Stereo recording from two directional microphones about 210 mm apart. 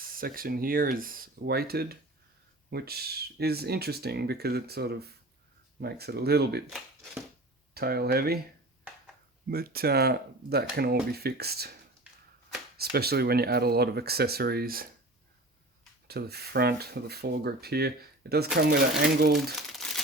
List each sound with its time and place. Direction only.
0.0 s speech: 45° right (ahead or behind)
6.7 s speech: centre (ahead or behind)
7.7 s speech: 45° right (ahead or behind)
9.5 s speech: 45° right (ahead or behind)
12.8 s speech: 50° right (ahead or behind)
16.0 s speech: 50° right (ahead or behind)
19.6 s crumpling: centre (ahead or behind)